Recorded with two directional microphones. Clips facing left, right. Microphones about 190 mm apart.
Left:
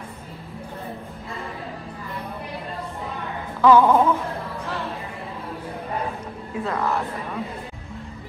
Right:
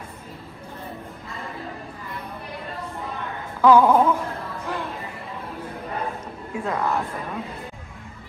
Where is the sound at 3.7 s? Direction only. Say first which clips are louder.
Even; 10° right (ahead or behind).